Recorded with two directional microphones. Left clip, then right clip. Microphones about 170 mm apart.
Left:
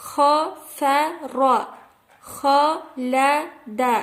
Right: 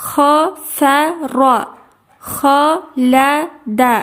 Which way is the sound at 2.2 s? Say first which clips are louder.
Right 6 dB; 50° right (ahead or behind).